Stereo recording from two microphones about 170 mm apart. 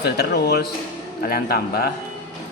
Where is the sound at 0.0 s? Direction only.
70° left (ahead or behind).